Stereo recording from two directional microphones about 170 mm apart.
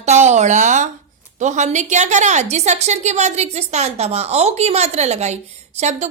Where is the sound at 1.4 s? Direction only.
45° right (ahead or behind).